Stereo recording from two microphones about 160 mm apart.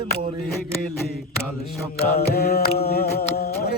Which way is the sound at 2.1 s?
75° left (ahead or behind).